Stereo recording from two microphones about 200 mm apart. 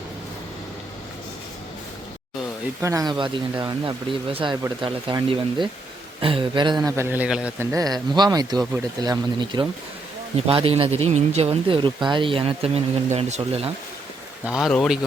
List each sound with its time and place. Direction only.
2.8 s speech: 15° right (ahead or behind); by 13.7 s 35° right (ahead or behind)
14.4 s speech: 5° right (ahead or behind)